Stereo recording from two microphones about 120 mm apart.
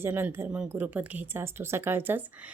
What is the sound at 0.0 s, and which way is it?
A woman's voice, 20° right (ahead or behind).